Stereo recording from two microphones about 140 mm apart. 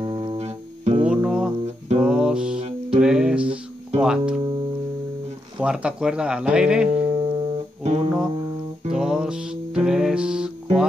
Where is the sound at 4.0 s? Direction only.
5° right (ahead or behind).